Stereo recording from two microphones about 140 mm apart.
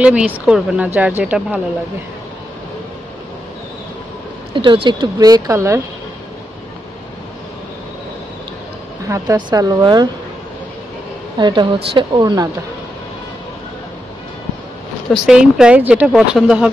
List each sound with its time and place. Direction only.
0.0 s speech: 10° right (ahead or behind)
4.6 s speech: 35° right (ahead or behind); by 5.8 s 20° right (ahead or behind)
9.0 s speech: 25° right (ahead or behind)
11.3 s a woman's voice: 35° right (ahead or behind)
15.0 s speech: 5° right (ahead or behind)